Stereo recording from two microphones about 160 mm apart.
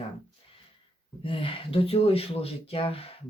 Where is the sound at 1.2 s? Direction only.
35° left (ahead or behind).